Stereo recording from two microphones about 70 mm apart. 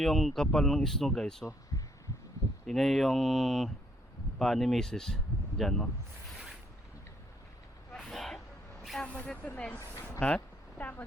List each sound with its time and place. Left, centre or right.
0.0 s speech: centre
1.7 s heart sounds: left
2.6 s speech: centre
8.0 s vehicle: centre
9.0 s speech: left
10.2 s a sound: centre